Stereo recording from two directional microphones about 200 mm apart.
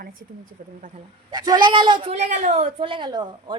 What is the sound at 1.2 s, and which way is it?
A woman's voice, 20° right (ahead or behind).